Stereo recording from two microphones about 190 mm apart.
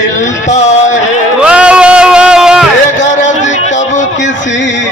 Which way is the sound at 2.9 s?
40° left (ahead or behind).